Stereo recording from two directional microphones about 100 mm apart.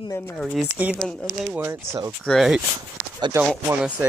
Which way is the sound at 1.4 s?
25° right (ahead or behind).